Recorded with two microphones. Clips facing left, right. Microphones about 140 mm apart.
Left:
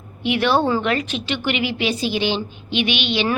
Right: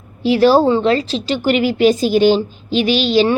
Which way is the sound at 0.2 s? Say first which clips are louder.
Right 7 dB; 35° right (ahead or behind).